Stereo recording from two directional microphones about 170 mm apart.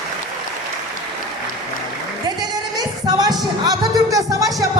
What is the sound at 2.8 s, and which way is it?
Music, 25° right (ahead or behind).